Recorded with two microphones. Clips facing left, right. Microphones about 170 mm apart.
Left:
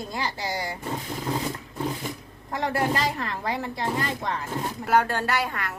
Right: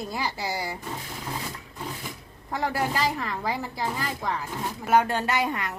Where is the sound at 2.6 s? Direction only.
5° right (ahead or behind).